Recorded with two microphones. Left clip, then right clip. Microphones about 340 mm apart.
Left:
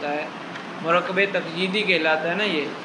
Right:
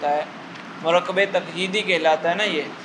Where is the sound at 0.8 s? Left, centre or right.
Centre.